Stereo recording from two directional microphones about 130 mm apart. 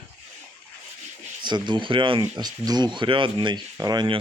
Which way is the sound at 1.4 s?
35° right (ahead or behind).